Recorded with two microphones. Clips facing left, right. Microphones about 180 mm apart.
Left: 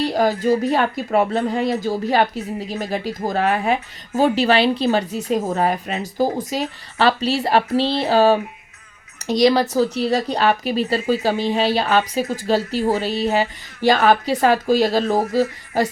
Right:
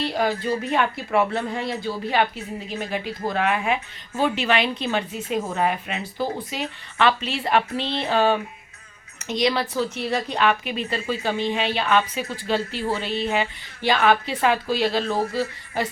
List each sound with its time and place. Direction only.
0.0 s speech: 40° left (ahead or behind)
1.8 s speech: 40° left (ahead or behind)